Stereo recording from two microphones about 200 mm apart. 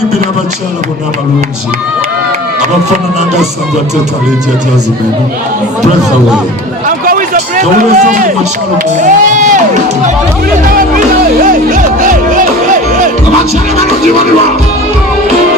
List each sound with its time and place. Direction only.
6.8 s speech: 40° right (ahead or behind)
11.4 s music: 45° right (ahead or behind)